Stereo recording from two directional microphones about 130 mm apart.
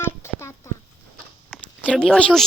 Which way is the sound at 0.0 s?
20° left (ahead or behind).